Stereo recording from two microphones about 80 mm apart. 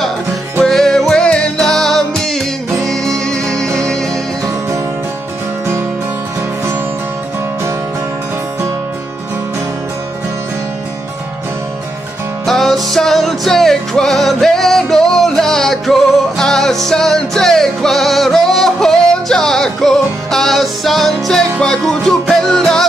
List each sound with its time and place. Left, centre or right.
0.7 s music: centre
12.4 s music: centre